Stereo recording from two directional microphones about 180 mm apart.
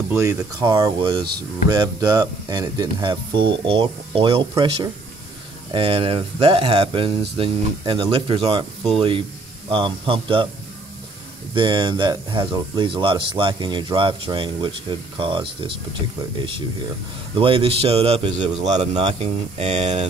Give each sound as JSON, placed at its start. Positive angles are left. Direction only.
{"t": 0.1, "sound": "speech", "side_deg": -15}
{"t": 11.5, "sound": "speech", "side_deg": -25}